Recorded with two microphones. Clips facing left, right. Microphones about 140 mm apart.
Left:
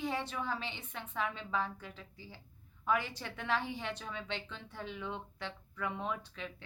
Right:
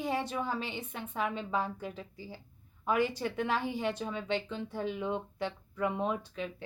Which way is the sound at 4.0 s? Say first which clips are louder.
Right 7 dB; 45° right (ahead or behind).